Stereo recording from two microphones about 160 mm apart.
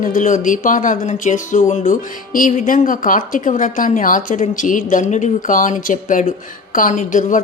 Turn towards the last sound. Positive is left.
turn(degrees=50)  # may be behind; listen again after turning